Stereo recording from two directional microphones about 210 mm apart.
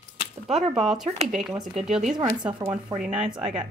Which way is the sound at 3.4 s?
5° right (ahead or behind).